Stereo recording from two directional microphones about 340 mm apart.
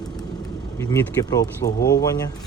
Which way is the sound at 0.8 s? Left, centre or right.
Centre.